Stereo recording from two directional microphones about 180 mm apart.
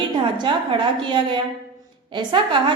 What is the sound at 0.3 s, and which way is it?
A woman's voice, 25° right (ahead or behind).